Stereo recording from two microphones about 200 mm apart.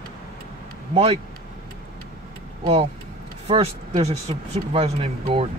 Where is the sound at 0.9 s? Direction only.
30° right (ahead or behind).